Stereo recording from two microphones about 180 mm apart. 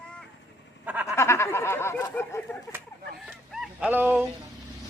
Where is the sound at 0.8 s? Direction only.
10° right (ahead or behind).